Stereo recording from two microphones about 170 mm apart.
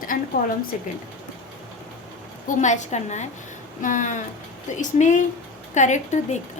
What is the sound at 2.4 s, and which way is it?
Speech, 45° left (ahead or behind).